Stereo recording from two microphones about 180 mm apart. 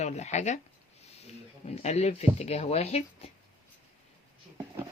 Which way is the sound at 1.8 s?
40° left (ahead or behind).